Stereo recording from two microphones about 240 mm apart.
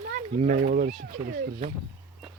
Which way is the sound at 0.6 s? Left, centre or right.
Right.